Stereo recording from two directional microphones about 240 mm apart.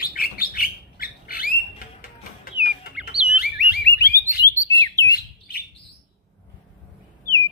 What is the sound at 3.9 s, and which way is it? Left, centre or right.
Alarm, left.